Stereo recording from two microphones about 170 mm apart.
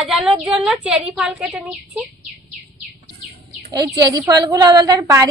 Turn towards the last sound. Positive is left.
turn(degrees=-20)  # may be behind; listen again after turning